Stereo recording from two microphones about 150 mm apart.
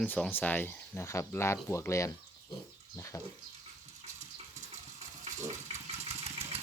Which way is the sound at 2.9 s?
20° left (ahead or behind).